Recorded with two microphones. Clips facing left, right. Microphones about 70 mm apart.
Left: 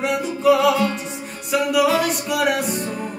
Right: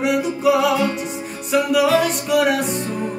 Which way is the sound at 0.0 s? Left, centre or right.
Centre.